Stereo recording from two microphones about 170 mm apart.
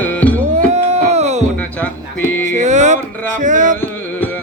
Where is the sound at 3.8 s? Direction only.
10° left (ahead or behind).